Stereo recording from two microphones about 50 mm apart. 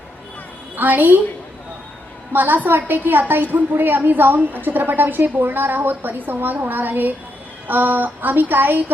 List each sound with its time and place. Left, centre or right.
0.8 s a woman's voice: right
2.3 s a woman's voice: right